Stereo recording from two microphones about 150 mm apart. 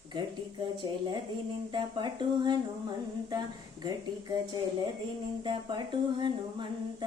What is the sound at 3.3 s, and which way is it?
Speech, 30° right (ahead or behind).